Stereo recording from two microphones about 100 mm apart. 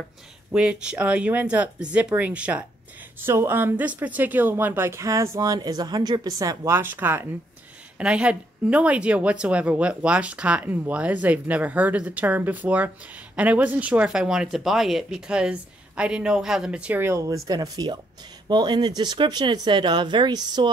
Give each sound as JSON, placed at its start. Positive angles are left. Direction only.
{"t": 0.5, "sound": "speech", "side_deg": -10}
{"t": 8.0, "sound": "speech", "side_deg": -10}
{"t": 17.0, "sound": "speech", "side_deg": -30}
{"t": 17.5, "sound": "speech", "side_deg": -40}